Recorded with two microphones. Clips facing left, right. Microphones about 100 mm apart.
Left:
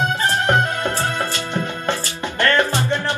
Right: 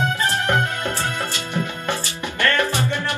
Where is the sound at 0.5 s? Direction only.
25° left (ahead or behind).